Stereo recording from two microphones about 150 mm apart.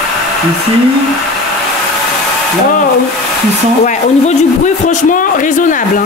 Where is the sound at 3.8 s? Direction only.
50° left (ahead or behind).